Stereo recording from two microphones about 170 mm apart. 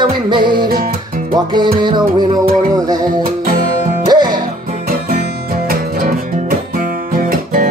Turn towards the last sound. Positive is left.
turn(degrees=-55)  # may be behind; listen again after turning